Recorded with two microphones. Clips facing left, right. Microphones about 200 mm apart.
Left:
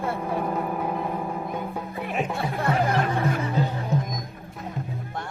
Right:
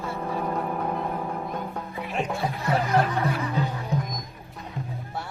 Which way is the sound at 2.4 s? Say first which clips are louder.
Left 3 dB; 55° left (ahead or behind).